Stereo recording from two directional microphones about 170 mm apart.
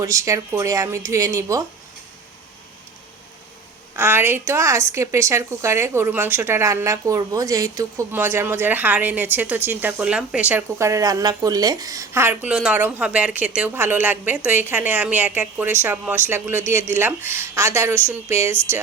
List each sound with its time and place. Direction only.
0.0 s speech: 20° right (ahead or behind)
3.9 s a woman's voice: 15° right (ahead or behind)